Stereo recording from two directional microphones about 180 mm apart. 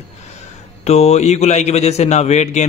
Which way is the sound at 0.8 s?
35° left (ahead or behind).